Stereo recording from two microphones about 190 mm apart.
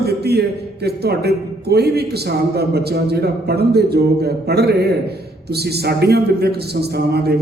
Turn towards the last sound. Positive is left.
turn(degrees=-55)  # may be behind; listen again after turning